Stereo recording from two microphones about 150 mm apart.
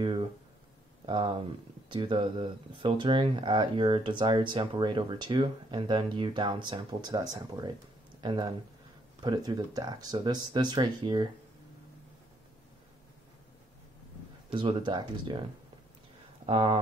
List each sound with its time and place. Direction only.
0.0 s a sound: 35° right (ahead or behind)
1.0 s speech: 30° right (ahead or behind)
14.5 s speech: 35° right (ahead or behind)
16.4 s speech: 35° right (ahead or behind)